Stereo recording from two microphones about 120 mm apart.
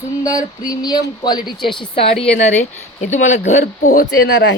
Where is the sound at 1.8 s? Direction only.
50° left (ahead or behind); by 4.1 s 80° left.